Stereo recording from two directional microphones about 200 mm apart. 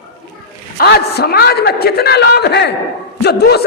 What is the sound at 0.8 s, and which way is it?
A man's voice, 50° left (ahead or behind).